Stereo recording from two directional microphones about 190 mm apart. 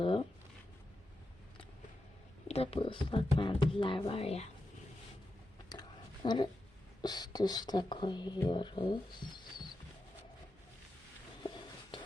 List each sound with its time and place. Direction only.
0.0 s a sound: 25° left (ahead or behind)
2.5 s speech: 30° left (ahead or behind)
6.2 s speech: 20° left (ahead or behind)